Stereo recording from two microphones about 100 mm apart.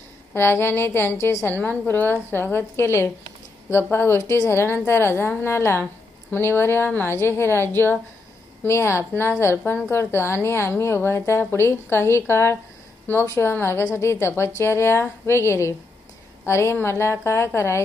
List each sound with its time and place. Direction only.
0.3 s a woman's voice: 20° left (ahead or behind)
1.6 s a woman's voice: 15° left (ahead or behind)